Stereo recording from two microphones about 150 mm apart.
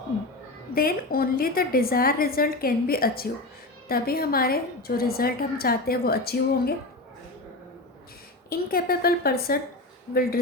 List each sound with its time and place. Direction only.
0.7 s a woman's voice: 80° left
8.4 s a woman's voice: 85° left